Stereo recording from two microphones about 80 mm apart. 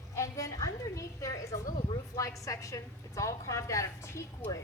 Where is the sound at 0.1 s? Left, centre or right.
Left.